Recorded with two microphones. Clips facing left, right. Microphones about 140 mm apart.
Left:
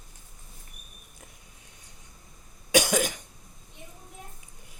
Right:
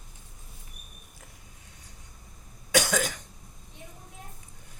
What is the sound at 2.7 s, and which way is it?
Cough, 15° left (ahead or behind).